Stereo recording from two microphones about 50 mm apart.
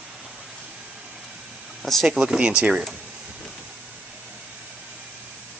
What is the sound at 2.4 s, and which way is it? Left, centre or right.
Speech, centre.